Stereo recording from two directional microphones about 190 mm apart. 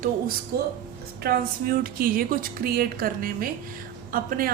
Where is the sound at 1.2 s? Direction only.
50° right (ahead or behind).